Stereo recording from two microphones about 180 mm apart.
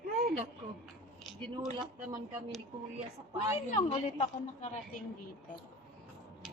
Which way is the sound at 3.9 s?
35° left (ahead or behind).